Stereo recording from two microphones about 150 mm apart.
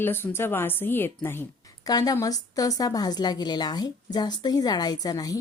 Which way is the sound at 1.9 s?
25° left (ahead or behind).